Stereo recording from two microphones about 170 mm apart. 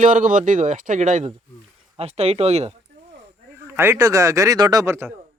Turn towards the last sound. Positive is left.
turn(degrees=-15)  # may be behind; listen again after turning